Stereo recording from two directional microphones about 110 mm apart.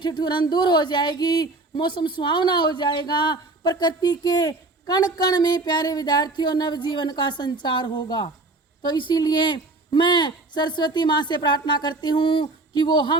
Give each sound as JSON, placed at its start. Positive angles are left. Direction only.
{"t": 0.0, "sound": "speech", "side_deg": 45}